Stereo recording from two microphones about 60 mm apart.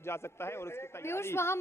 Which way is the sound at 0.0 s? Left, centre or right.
Left.